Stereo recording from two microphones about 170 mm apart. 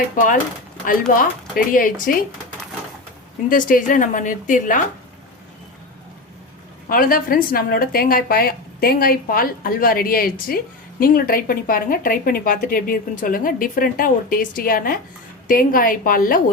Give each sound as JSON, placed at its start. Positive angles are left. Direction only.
{"t": 0.9, "sound": "speech", "side_deg": 55}
{"t": 3.5, "sound": "a woman's voice", "side_deg": 50}
{"t": 6.8, "sound": "speech", "side_deg": 55}